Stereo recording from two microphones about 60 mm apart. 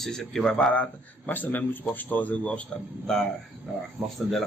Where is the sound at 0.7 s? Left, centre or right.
Left.